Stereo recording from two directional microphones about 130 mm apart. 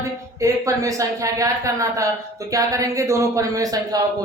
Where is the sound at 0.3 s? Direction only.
25° right (ahead or behind).